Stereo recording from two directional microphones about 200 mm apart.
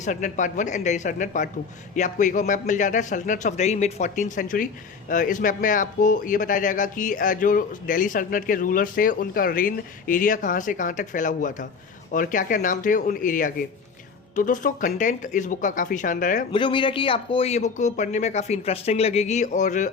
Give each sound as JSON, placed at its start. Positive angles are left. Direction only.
{"t": 0.0, "sound": "a man's voice", "side_deg": 40}
{"t": 16.5, "sound": "a man's voice", "side_deg": 25}